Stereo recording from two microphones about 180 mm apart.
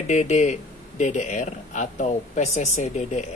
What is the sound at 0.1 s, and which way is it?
A man's voice, 40° left (ahead or behind).